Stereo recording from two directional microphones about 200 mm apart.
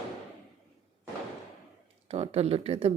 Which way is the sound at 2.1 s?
30° right (ahead or behind).